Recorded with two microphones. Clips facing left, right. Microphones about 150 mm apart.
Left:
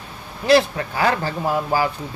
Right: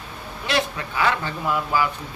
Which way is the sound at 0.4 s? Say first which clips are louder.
Left 9 dB; 35° left (ahead or behind).